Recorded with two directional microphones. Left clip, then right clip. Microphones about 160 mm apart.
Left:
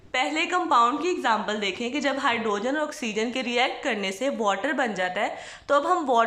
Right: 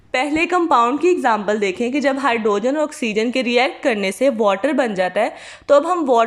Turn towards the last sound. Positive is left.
turn(degrees=-25)  # may be behind; listen again after turning